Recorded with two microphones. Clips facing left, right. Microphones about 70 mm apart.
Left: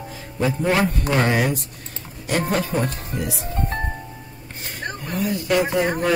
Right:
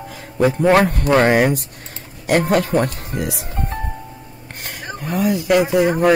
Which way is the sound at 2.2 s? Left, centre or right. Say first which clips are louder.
Right 6 dB; right.